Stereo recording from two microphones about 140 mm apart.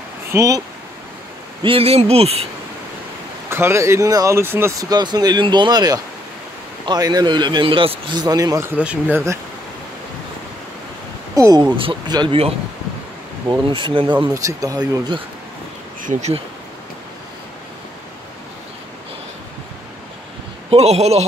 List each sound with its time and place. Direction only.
0.3 s speech: 20° right (ahead or behind)
1.6 s speech: 40° right (ahead or behind)
3.4 s speech: 20° right (ahead or behind)
11.3 s speech: 25° right (ahead or behind)
11.7 s speech: 35° right (ahead or behind)
13.5 s speech: 35° right (ahead or behind)
14.3 s speech: 25° right (ahead or behind)
16.0 s speech: 60° right (ahead or behind)
20.7 s speech: 50° right (ahead or behind)